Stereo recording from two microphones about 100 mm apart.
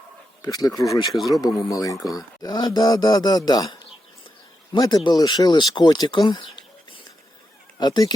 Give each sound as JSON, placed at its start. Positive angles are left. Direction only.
{"t": 0.4, "sound": "speech", "side_deg": 40}